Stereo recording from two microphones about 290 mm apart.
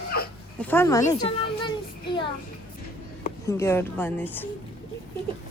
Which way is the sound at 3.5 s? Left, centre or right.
Centre.